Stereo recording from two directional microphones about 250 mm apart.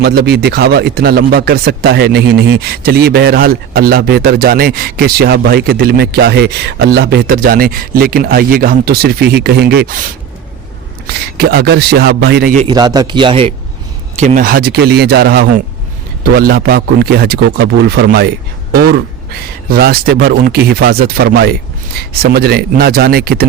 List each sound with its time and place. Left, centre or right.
0.0 s speech: right
11.0 s speech: right
12.6 s a man's voice: centre
14.2 s speech: right